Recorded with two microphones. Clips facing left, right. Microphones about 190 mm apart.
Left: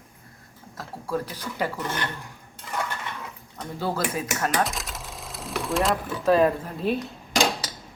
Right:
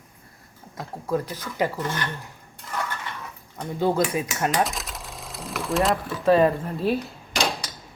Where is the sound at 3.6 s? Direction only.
20° right (ahead or behind).